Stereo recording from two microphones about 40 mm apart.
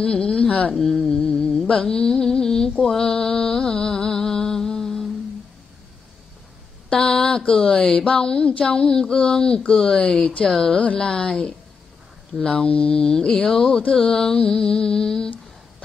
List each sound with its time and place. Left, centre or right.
0.0 s speech: left
0.7 s music: centre
1.0 s a sound: centre
1.7 s music: left
6.9 s mantra: centre
7.7 s music: centre
8.0 s speech: left
9.7 s music: centre
12.6 s speech: left
13.3 s music: centre